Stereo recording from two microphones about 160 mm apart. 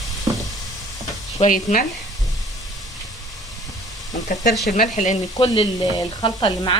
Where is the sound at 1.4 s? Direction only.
55° left (ahead or behind).